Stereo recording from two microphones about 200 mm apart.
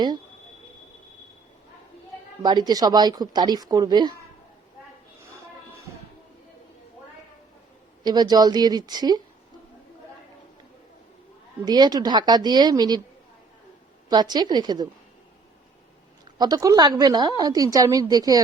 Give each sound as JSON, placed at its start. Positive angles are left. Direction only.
{"t": 2.4, "sound": "a woman's voice", "side_deg": -20}
{"t": 8.0, "sound": "a woman's voice", "side_deg": -20}
{"t": 11.6, "sound": "a woman's voice", "side_deg": -20}
{"t": 14.1, "sound": "a woman's voice", "side_deg": -20}
{"t": 16.4, "sound": "a woman's voice", "side_deg": -20}